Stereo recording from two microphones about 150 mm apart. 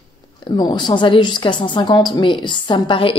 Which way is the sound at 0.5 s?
30° left (ahead or behind).